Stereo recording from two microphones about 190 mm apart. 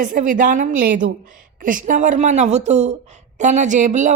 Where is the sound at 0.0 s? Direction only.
45° right (ahead or behind).